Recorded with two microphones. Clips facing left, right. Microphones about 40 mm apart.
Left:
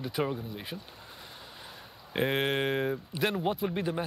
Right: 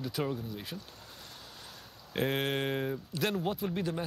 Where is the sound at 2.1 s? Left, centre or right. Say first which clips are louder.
Left 3 dB; centre.